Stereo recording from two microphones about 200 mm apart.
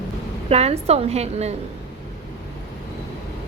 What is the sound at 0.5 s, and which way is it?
A woman's voice, 30° right (ahead or behind).